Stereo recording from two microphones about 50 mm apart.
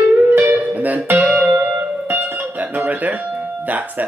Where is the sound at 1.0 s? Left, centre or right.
Right.